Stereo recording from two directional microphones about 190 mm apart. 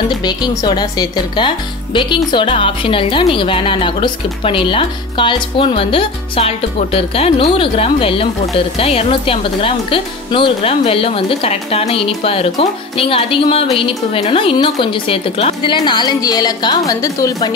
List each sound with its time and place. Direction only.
0.2 s a woman's voice: 20° left (ahead or behind)